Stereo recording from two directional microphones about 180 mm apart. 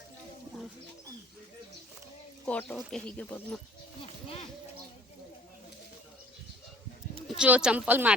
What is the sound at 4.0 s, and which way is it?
Speech, 35° left (ahead or behind).